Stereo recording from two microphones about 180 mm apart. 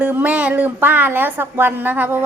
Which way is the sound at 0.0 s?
10° right (ahead or behind).